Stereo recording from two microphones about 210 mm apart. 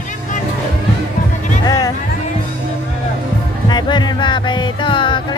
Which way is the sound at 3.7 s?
20° left (ahead or behind).